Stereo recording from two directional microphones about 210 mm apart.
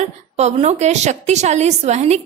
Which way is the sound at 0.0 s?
30° right (ahead or behind).